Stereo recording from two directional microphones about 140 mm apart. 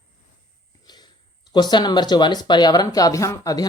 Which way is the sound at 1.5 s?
30° left (ahead or behind).